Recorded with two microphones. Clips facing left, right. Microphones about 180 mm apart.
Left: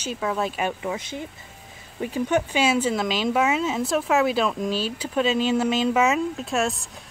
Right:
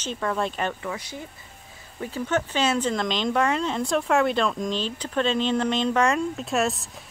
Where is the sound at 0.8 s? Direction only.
20° left (ahead or behind).